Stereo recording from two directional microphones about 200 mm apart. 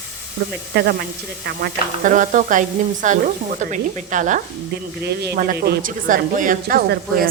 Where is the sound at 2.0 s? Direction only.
40° right (ahead or behind).